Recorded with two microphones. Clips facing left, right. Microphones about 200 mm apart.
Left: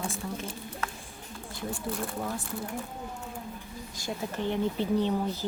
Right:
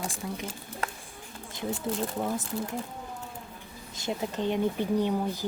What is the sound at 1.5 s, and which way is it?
Speech, 20° right (ahead or behind).